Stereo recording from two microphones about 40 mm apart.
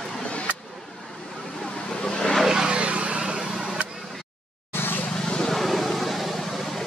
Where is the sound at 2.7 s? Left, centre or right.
Right.